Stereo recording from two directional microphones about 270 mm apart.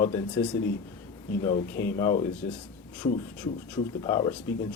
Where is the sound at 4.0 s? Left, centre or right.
Centre.